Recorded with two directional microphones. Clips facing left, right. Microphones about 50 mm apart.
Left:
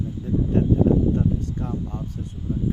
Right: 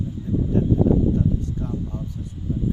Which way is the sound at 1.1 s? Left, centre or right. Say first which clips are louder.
Even; left.